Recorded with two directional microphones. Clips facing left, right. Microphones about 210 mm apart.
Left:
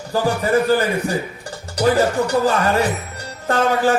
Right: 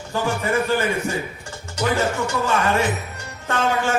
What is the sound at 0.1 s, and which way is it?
Speech, 35° left (ahead or behind).